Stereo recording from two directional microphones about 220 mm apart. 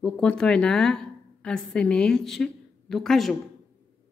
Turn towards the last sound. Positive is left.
turn(degrees=0)  # may be behind; listen again after turning